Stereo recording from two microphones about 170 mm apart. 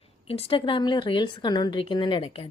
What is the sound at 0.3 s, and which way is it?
A woman's voice, 35° left (ahead or behind).